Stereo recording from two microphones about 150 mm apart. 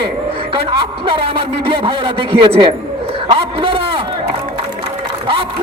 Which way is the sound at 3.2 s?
35° right (ahead or behind).